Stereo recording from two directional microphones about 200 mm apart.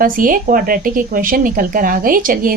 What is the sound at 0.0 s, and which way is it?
A woman's voice, 45° right (ahead or behind).